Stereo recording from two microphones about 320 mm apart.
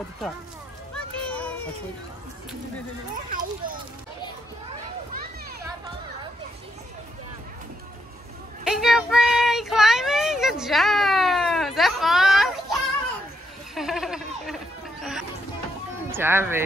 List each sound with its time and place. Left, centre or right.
0.9 s children playing: centre
3.3 s a child's voice: right
8.6 s child singing: centre
13.7 s goat: centre
16.1 s speech: centre